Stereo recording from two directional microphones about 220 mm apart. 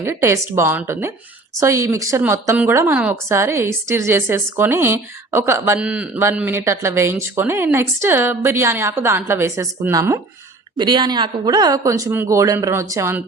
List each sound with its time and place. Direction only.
0.0 s a woman's voice: 10° right (ahead or behind)